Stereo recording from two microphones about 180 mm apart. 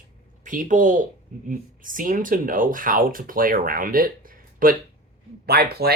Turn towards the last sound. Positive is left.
turn(degrees=-60)  # may be behind; listen again after turning